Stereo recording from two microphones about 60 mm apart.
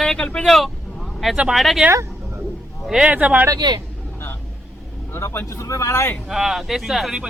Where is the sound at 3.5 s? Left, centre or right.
Right.